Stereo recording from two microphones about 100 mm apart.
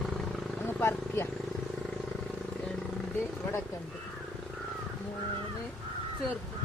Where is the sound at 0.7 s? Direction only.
25° left (ahead or behind).